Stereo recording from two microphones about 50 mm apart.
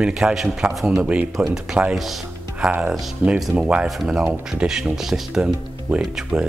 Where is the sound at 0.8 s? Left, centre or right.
Right.